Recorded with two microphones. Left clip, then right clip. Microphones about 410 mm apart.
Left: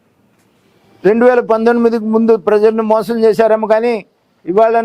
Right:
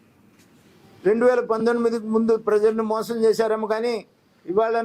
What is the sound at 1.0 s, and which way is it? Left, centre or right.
A man's voice, left.